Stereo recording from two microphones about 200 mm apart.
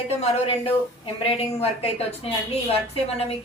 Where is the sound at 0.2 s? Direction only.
30° left (ahead or behind).